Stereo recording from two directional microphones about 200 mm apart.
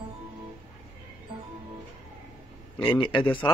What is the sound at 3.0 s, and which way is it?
Speech, 25° left (ahead or behind).